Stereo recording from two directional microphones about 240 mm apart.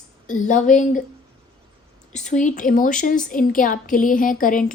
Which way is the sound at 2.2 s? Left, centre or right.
Left.